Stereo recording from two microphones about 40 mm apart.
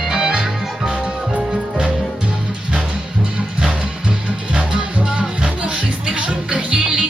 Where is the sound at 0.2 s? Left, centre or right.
Centre.